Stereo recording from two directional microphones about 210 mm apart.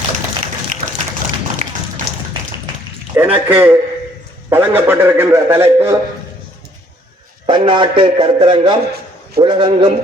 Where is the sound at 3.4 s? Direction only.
10° right (ahead or behind).